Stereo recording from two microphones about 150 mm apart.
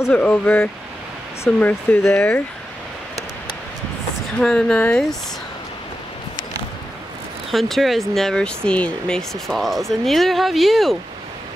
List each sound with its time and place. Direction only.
0.0 s speech: 10° left (ahead or behind)
4.4 s speech: 5° left (ahead or behind)
7.5 s speech: centre (ahead or behind)